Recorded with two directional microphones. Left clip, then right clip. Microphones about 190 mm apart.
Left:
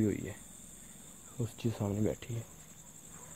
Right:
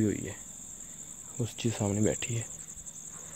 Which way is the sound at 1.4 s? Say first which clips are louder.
Right 5 dB; 15° right (ahead or behind).